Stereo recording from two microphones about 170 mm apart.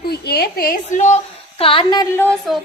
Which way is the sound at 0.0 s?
65° left (ahead or behind).